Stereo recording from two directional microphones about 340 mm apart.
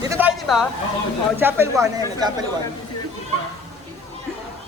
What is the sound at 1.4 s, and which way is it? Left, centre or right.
Speech, centre.